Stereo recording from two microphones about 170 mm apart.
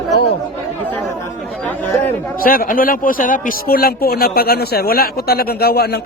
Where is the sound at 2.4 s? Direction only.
60° left (ahead or behind).